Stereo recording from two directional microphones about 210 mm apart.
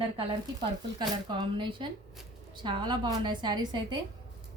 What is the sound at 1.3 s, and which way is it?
A woman's voice, 25° right (ahead or behind).